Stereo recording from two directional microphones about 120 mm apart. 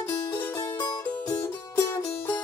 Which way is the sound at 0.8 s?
30° left (ahead or behind).